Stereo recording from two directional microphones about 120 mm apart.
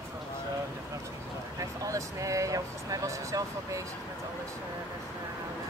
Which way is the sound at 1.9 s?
25° right (ahead or behind).